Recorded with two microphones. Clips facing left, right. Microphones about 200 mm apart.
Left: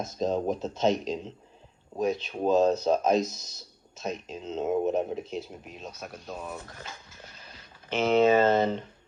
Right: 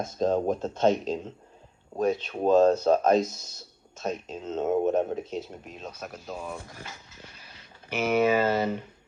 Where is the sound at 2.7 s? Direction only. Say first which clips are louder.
Right 3 dB; 5° right (ahead or behind).